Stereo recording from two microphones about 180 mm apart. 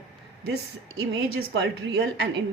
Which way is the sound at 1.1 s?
70° right (ahead or behind).